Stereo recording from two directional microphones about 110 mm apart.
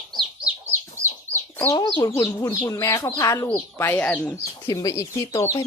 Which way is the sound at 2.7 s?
30° left (ahead or behind).